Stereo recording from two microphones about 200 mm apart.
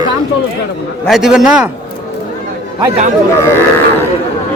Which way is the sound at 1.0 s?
Centre (ahead or behind).